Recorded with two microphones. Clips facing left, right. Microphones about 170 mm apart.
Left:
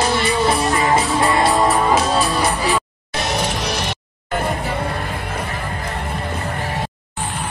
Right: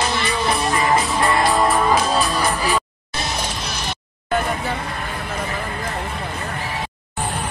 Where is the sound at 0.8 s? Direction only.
25° left (ahead or behind).